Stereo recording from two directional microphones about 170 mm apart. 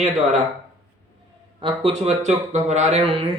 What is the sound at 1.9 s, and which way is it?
Speech, 40° right (ahead or behind).